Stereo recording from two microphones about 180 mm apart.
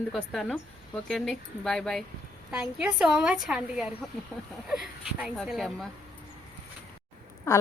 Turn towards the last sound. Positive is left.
turn(degrees=20)  # may be behind; listen again after turning